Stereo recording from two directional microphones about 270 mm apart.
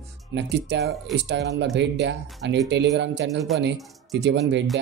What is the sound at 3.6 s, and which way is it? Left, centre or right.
Speech, right.